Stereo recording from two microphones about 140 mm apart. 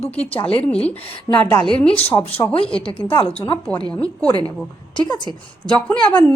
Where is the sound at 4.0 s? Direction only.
10° left (ahead or behind).